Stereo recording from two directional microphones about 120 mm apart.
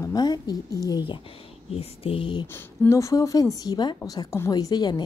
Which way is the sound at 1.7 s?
50° left (ahead or behind).